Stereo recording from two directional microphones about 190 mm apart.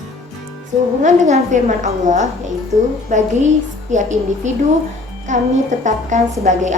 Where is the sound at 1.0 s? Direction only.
40° right (ahead or behind).